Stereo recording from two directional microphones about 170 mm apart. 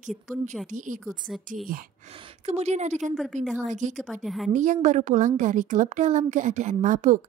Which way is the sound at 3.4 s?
Centre (ahead or behind).